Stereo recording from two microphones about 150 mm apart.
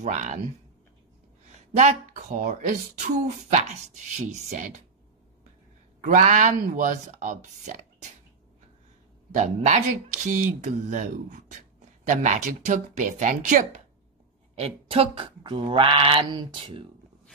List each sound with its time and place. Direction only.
0.0 s speech: 55° right (ahead or behind)
1.8 s speech: 55° right (ahead or behind)
6.0 s speech: 60° right (ahead or behind)
9.3 s speech: 55° right (ahead or behind)
14.5 s a sound: 40° right (ahead or behind)